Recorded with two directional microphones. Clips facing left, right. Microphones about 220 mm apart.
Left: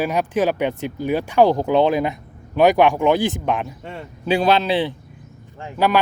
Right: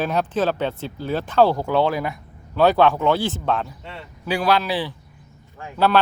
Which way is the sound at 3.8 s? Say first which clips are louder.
Left 4 dB; 50° left (ahead or behind).